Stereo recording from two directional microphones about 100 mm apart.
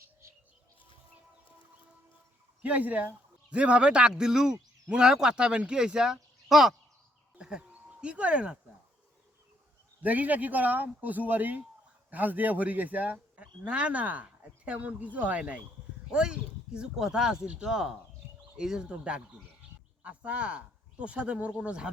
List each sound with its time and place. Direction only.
2.6 s speech: 15° right (ahead or behind)
10.0 s speech: 15° right (ahead or behind)